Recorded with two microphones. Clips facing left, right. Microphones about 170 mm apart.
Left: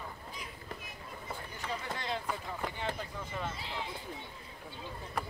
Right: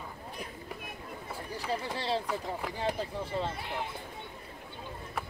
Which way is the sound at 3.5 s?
55° right (ahead or behind).